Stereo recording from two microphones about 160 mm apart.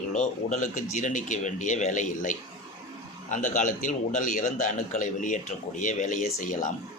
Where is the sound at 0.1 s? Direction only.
50° left (ahead or behind).